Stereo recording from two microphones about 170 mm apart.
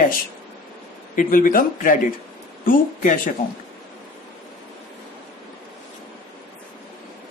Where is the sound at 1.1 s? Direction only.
50° left (ahead or behind).